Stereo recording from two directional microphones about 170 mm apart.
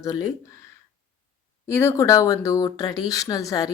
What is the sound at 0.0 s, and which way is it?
Speech, 20° left (ahead or behind).